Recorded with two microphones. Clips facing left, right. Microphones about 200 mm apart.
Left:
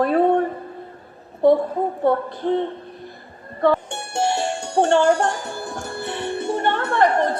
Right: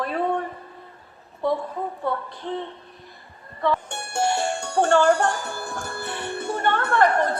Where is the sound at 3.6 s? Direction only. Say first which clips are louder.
Left 6 dB; 50° left (ahead or behind).